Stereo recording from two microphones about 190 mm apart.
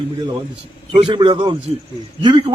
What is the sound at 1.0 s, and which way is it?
A man's voice, 25° right (ahead or behind).